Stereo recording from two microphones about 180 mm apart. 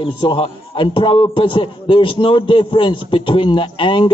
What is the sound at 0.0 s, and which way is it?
A man's voice, 30° left (ahead or behind).